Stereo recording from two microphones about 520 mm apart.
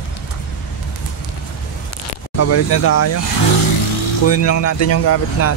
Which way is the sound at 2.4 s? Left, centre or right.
Left.